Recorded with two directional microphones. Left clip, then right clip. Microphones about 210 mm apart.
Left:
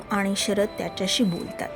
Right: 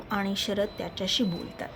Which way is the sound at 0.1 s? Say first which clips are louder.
Left 5 dB; 25° left (ahead or behind).